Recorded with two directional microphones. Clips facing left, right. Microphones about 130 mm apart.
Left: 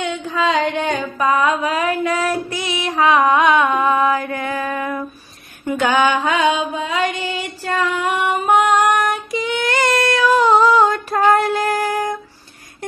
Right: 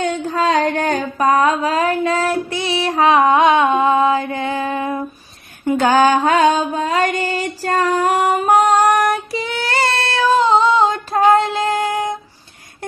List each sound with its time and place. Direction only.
0.0 s a sound: 40° right (ahead or behind)
2.0 s female singing: 25° right (ahead or behind)
5.7 s mantra: 35° right (ahead or behind)